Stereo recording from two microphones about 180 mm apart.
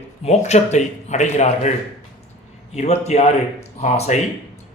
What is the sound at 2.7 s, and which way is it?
A man's voice, 40° left (ahead or behind).